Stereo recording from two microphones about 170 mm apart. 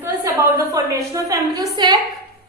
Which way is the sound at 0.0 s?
20° right (ahead or behind).